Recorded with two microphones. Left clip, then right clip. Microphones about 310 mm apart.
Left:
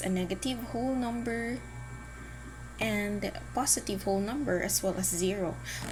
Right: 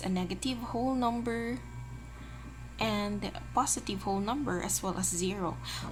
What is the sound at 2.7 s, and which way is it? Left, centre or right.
A woman's voice, centre.